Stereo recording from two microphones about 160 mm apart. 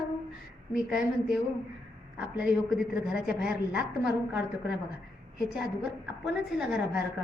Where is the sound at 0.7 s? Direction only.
5° right (ahead or behind).